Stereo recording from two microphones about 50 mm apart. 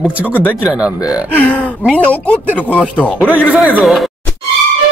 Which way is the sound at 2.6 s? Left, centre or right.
Right.